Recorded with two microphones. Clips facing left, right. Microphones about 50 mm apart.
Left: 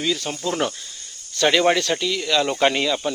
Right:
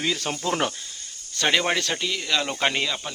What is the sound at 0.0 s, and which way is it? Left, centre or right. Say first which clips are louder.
Speech: left 2 dB; right.